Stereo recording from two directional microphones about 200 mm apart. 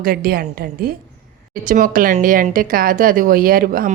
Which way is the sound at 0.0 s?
45° right (ahead or behind).